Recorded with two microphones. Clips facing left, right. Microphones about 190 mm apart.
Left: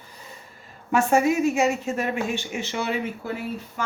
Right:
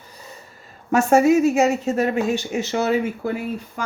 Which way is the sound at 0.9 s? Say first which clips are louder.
Right 5 dB; 40° right (ahead or behind).